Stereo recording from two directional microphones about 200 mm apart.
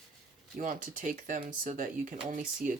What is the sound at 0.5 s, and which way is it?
Speech, 40° right (ahead or behind).